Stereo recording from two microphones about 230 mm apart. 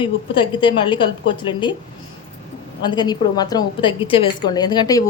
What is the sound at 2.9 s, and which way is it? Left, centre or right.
A woman's voice, centre.